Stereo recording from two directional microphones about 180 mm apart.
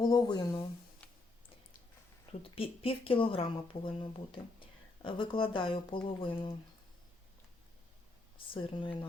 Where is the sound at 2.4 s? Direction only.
30° left (ahead or behind).